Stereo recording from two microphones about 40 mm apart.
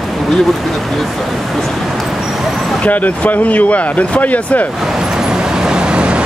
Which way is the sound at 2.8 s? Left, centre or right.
Left.